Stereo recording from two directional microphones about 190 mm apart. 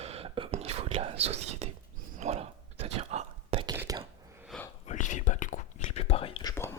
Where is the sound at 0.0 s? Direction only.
30° right (ahead or behind).